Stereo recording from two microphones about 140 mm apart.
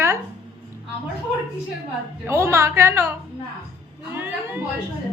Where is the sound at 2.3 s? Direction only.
20° right (ahead or behind).